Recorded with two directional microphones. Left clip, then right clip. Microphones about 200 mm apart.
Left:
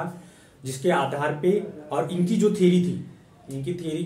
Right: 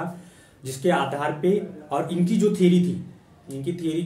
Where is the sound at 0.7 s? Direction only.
10° right (ahead or behind).